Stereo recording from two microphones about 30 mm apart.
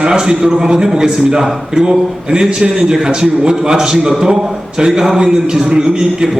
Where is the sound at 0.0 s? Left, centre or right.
Right.